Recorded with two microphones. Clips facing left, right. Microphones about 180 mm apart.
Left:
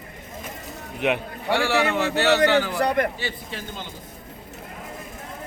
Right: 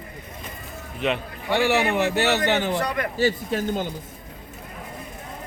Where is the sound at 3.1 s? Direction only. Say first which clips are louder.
Right 10 dB; 45° right (ahead or behind).